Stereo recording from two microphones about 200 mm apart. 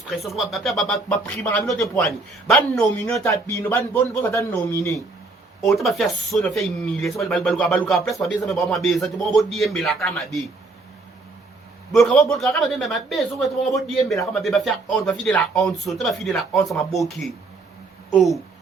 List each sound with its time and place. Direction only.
0.1 s speech: centre (ahead or behind)
1.4 s a man's voice: 15° left (ahead or behind)
1.6 s speech: centre (ahead or behind)
2.6 s a man's voice: 15° left (ahead or behind)
5.6 s speech: centre (ahead or behind)
11.9 s speech: centre (ahead or behind)